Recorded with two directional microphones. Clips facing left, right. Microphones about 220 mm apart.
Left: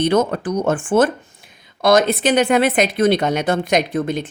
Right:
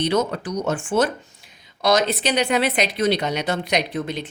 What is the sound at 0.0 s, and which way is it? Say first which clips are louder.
Speech: left 5 dB; 50° left (ahead or behind).